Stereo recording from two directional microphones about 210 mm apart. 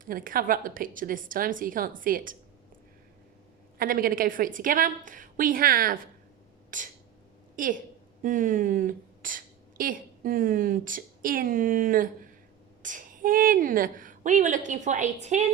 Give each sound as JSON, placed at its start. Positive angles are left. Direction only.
{"t": 0.0, "sound": "a woman's voice", "side_deg": -40}
{"t": 3.8, "sound": "a woman's voice", "side_deg": -40}
{"t": 6.7, "sound": "a sound", "side_deg": -40}
{"t": 7.5, "sound": "a woman's voice", "side_deg": -40}